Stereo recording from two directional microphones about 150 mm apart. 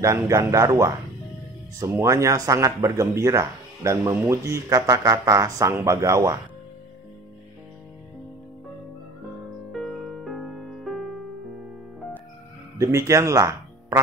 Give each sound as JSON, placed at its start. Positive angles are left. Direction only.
{"t": 0.0, "sound": "speech", "side_deg": -20}
{"t": 9.7, "sound": "music", "side_deg": 0}
{"t": 12.7, "sound": "speech", "side_deg": -20}